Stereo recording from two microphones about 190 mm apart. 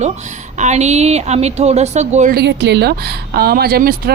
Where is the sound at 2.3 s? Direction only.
65° right (ahead or behind).